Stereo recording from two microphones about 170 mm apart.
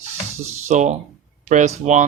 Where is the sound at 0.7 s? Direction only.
45° right (ahead or behind).